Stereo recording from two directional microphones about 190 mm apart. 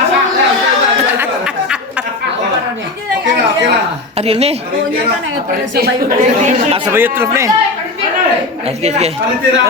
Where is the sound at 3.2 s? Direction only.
70° right (ahead or behind).